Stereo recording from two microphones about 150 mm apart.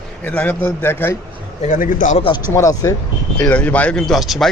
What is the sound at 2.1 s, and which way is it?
Speech, 35° left (ahead or behind).